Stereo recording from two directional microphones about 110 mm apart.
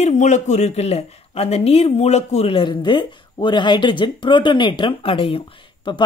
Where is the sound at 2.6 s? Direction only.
50° left (ahead or behind).